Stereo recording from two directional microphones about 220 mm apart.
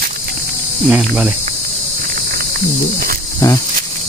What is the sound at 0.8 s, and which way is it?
Speech, 5° right (ahead or behind).